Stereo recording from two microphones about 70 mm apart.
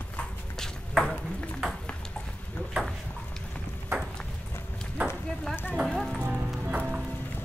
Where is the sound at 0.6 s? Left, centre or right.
Centre.